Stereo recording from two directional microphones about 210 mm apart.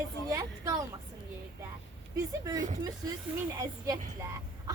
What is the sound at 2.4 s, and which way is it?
Speech, 15° right (ahead or behind).